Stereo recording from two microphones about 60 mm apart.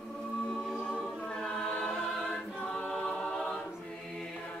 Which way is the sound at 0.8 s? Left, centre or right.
Centre.